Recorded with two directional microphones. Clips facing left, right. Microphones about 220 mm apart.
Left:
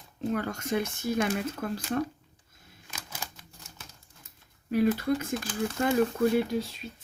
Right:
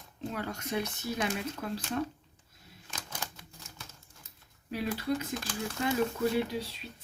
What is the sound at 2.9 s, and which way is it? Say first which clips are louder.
Camera: even; 10° left (ahead or behind).